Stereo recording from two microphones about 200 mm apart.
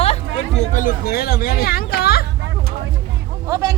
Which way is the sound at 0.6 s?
40° left (ahead or behind).